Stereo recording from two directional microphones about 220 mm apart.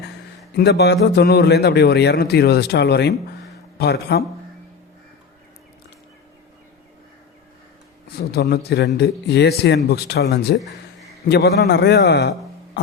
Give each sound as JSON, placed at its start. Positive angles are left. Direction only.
{"t": 0.5, "sound": "a man's voice", "side_deg": 50}
{"t": 8.3, "sound": "a man's voice", "side_deg": 45}
{"t": 12.8, "sound": "a sound", "side_deg": 50}